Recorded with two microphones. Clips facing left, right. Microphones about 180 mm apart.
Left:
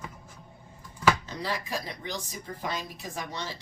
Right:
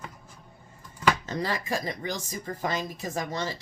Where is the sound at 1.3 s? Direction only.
45° right (ahead or behind).